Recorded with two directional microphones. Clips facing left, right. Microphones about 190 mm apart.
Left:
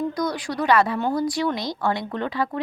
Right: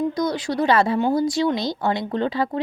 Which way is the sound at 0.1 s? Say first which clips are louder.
Right 3 dB; 25° right (ahead or behind).